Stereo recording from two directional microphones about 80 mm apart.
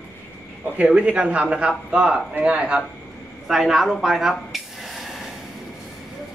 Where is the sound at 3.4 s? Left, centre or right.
Centre.